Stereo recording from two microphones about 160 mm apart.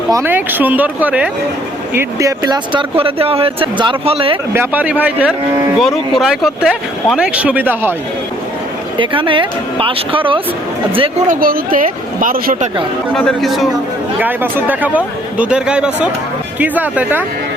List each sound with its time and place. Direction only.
0.1 s speech: 15° right (ahead or behind); by 4.4 s 35° right (ahead or behind)
4.5 s speech: 10° right (ahead or behind)
9.0 s speech: 30° right (ahead or behind)
11.3 s speech: 65° right (ahead or behind)
13.1 s speech: centre (ahead or behind)
14.2 s speech: 10° right (ahead or behind)